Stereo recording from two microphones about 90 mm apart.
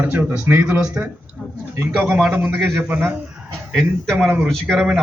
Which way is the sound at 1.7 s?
25° right (ahead or behind).